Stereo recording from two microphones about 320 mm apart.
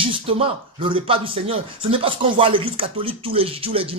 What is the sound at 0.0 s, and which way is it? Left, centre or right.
A man's voice, centre.